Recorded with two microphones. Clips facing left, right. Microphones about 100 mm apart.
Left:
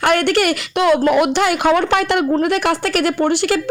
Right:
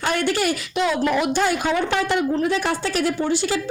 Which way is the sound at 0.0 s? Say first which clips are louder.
Left 6 dB; 65° left (ahead or behind).